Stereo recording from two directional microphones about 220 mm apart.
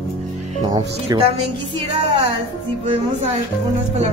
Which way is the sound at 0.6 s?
20° right (ahead or behind).